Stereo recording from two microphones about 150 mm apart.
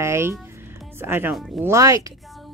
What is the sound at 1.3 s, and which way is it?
Speech, centre (ahead or behind).